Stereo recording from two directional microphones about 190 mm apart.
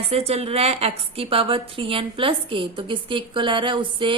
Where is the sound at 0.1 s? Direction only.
35° right (ahead or behind).